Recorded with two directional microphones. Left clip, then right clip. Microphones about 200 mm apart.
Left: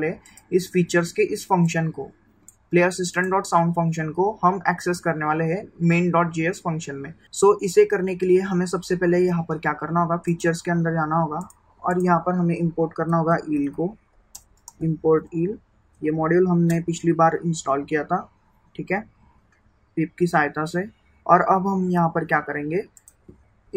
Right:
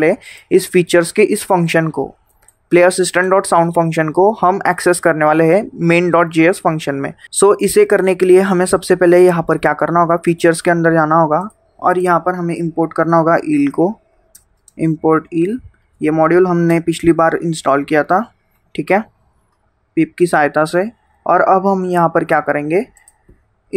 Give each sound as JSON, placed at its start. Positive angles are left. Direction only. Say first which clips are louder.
{"t": 0.0, "sound": "speech", "louder": "right 13 dB", "side_deg": -55}
{"t": 15.0, "sound": "speech", "louder": "right 5 dB", "side_deg": -55}
{"t": 19.9, "sound": "speech", "louder": "right 9 dB", "side_deg": -45}